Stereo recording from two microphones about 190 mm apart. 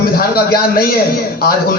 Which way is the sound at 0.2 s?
50° left (ahead or behind).